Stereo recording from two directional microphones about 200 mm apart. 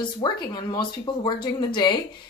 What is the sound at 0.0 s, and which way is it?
Speech, 20° left (ahead or behind).